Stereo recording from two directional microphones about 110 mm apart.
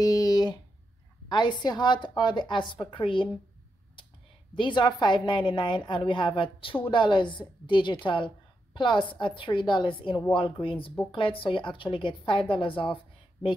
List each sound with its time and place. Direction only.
0.0 s a sound: 35° left (ahead or behind)
1.3 s a woman's voice: 45° left (ahead or behind)
4.6 s a woman's voice: 45° left (ahead or behind)